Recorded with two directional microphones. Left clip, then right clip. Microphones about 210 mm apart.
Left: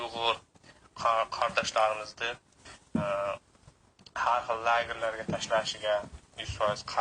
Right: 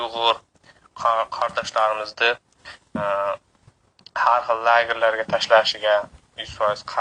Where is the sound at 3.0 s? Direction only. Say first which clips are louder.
Right 8 dB; 25° right (ahead or behind).